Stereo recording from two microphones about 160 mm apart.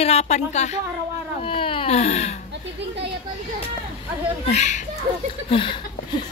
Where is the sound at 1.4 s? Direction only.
35° left (ahead or behind).